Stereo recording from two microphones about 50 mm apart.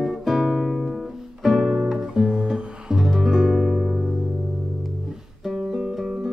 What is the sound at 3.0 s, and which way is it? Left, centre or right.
Music, centre.